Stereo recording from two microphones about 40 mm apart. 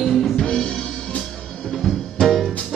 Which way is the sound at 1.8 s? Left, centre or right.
Centre.